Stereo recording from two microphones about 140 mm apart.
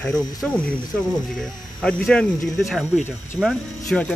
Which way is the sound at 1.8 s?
5° left (ahead or behind).